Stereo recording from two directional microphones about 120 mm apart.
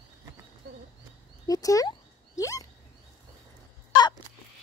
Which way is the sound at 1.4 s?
30° left (ahead or behind).